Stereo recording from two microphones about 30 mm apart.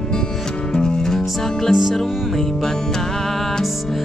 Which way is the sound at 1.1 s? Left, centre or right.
Centre.